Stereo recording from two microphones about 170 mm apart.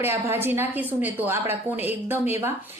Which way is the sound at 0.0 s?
15° right (ahead or behind).